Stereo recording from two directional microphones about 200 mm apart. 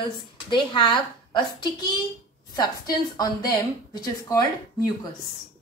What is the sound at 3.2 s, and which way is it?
A woman's voice, 20° left (ahead or behind).